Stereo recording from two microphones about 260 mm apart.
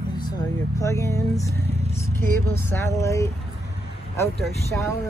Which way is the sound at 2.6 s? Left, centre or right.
Centre.